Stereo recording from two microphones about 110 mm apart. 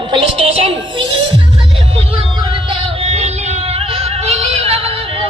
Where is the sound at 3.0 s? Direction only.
75° right (ahead or behind).